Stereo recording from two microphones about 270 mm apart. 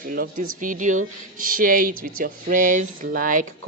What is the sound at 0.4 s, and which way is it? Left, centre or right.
Speech, right.